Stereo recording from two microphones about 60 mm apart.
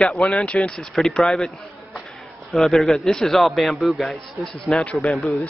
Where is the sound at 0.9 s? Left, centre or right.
Centre.